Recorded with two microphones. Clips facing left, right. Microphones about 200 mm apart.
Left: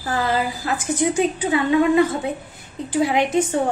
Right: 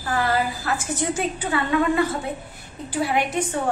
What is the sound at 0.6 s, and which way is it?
A woman's voice, 15° left (ahead or behind).